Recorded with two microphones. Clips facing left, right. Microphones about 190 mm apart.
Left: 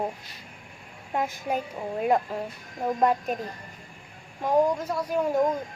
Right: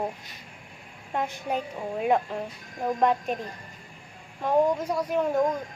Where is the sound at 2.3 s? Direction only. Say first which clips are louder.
Left 1 dB; 5° left (ahead or behind).